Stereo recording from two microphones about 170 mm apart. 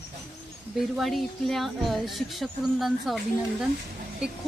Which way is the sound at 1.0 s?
Centre (ahead or behind).